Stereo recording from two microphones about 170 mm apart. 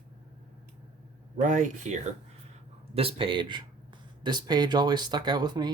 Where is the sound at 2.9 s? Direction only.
30° right (ahead or behind).